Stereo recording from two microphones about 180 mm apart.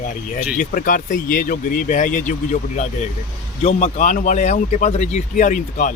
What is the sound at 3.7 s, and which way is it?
Speech, 40° left (ahead or behind).